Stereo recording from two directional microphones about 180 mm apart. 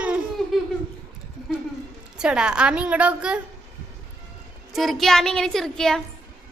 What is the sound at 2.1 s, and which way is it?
A woman's voice, 5° right (ahead or behind).